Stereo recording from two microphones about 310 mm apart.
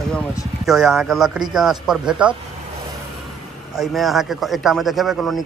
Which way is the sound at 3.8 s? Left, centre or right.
Centre.